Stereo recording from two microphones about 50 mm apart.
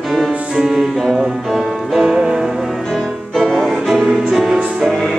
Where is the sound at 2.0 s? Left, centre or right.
Centre.